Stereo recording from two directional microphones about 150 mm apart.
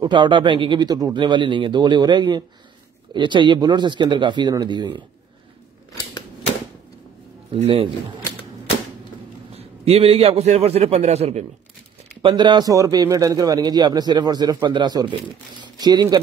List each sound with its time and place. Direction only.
0.0 s a man's voice: 30° right (ahead or behind)
7.5 s a man's voice: 40° right (ahead or behind)
9.6 s a man's voice: 40° right (ahead or behind)
12.2 s a man's voice: 35° right (ahead or behind)